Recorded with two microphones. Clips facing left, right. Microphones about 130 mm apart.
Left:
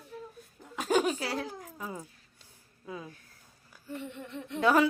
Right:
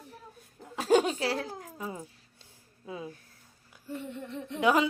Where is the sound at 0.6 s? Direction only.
30° right (ahead or behind).